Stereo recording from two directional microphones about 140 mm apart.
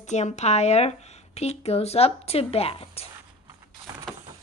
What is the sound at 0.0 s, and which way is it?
Speech, 55° left (ahead or behind).